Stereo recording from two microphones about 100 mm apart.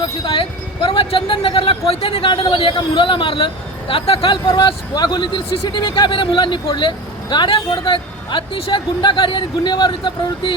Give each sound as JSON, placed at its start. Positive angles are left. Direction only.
{"t": 0.0, "sound": "speech", "side_deg": 55}